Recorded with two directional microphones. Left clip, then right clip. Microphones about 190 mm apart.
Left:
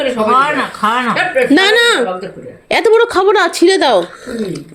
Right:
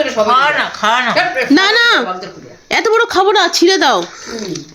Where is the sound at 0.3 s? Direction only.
35° right (ahead or behind).